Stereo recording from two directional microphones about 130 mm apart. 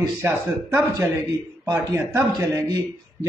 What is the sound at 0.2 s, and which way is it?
A man's voice, 20° right (ahead or behind).